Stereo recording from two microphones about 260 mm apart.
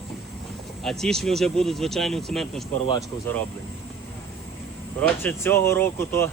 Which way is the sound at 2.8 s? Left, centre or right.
Centre.